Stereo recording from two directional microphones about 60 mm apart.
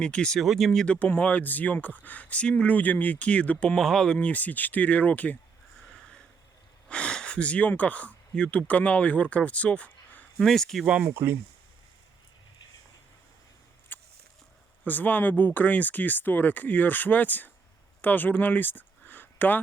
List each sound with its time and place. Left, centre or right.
0.0 s speech: centre
0.3 s speech: centre
0.9 s speech: left
3.8 s speech: centre
4.2 s speech: left
6.8 s speech: centre
10.3 s speech: centre
11.1 s speech: right
13.9 s a sound: left
14.8 s speech: left